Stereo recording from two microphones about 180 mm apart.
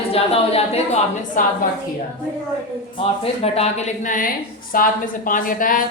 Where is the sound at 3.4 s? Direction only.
35° left (ahead or behind).